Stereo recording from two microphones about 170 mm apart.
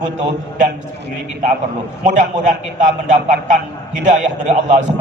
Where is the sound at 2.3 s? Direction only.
45° right (ahead or behind).